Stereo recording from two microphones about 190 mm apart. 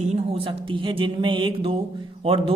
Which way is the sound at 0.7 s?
25° right (ahead or behind).